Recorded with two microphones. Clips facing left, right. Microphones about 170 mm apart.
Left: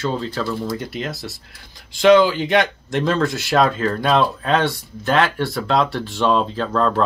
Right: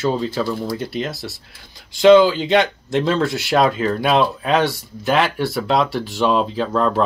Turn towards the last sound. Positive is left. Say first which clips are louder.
# right 1 dB
turn(degrees=-5)  # may be behind; listen again after turning